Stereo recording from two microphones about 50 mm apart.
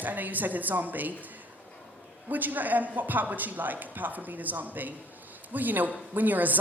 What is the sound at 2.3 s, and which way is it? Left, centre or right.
Speech, right.